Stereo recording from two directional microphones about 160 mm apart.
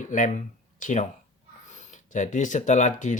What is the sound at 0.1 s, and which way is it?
Speech, 50° left (ahead or behind).